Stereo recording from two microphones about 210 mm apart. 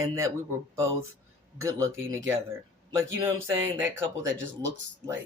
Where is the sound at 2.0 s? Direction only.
10° right (ahead or behind).